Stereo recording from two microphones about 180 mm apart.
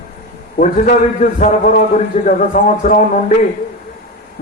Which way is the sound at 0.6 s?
45° left (ahead or behind).